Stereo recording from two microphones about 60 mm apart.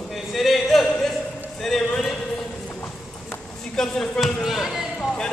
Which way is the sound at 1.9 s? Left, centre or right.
Centre.